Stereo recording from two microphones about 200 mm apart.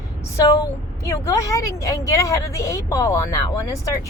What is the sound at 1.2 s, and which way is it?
Speech, 15° left (ahead or behind).